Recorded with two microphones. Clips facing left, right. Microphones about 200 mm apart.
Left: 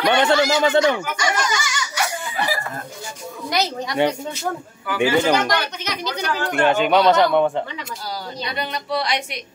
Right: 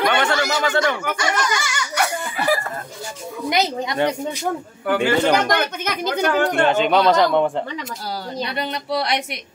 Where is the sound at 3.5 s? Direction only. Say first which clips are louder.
Right 2 dB; 20° right (ahead or behind).